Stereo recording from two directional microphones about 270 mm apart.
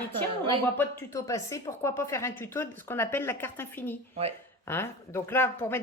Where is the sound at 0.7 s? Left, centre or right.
Centre.